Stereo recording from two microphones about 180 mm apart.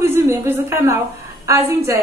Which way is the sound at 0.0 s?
15° right (ahead or behind).